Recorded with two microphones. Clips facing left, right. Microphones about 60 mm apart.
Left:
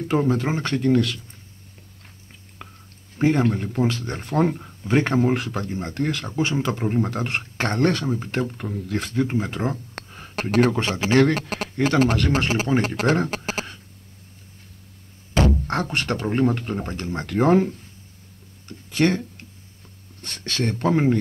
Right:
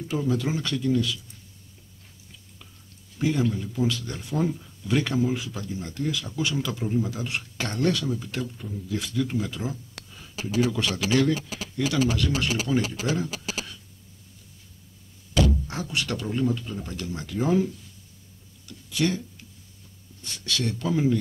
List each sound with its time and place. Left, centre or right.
0.0 s speech: left
2.6 s whispering: left
3.2 s speech: left
4.8 s speech: left
10.8 s speech: left
11.1 s speech: left
15.3 s speech: left
18.7 s a sound: left
20.2 s speech: left